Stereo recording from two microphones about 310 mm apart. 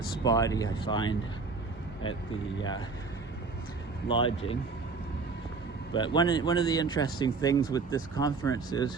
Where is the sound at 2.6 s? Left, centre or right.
Centre.